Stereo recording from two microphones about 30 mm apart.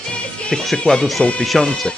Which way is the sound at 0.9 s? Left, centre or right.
Left.